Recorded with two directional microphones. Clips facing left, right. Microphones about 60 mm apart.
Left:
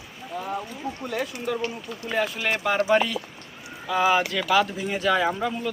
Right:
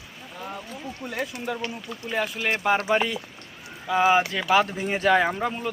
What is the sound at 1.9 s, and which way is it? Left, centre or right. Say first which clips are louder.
Speech: left 1 dB; centre.